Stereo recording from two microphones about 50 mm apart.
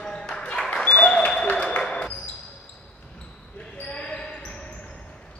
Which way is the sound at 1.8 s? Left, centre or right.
Centre.